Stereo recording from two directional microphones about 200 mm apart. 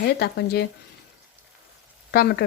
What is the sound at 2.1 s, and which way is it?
Speech, 50° left (ahead or behind).